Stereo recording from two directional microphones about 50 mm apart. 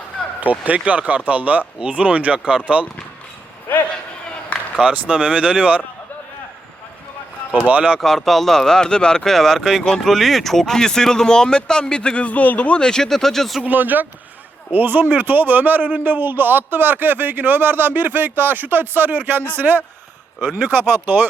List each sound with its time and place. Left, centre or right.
0.6 s speech: right
3.7 s a man's voice: left
4.5 s a sound: left
4.9 s speech: right
7.7 s a man's voice: right
7.9 s speech: centre; by 12.8 s left
12.8 s speech: centre
13.7 s a man's voice: right
20.7 s speech: right